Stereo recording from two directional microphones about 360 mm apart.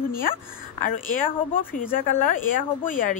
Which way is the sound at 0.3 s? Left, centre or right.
Left.